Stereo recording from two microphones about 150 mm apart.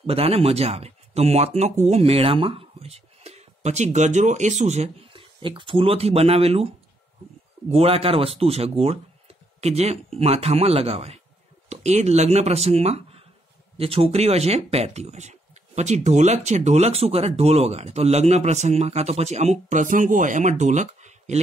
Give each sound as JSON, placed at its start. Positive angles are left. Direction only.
{"t": 0.0, "sound": "speech", "side_deg": -40}
{"t": 7.7, "sound": "speech", "side_deg": -40}